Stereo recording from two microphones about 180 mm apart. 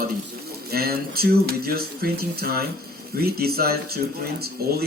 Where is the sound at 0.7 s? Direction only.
55° right (ahead or behind).